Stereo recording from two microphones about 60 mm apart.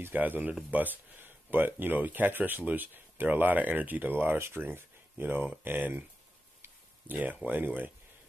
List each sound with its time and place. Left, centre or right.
0.0 s speech: right